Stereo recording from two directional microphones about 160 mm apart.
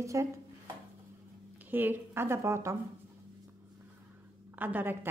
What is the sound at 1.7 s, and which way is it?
A woman's voice, 10° right (ahead or behind).